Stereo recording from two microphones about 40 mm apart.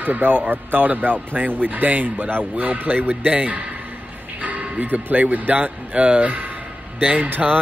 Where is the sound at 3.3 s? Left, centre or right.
Right.